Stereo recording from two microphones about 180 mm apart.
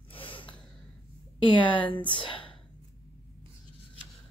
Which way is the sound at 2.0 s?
25° left (ahead or behind).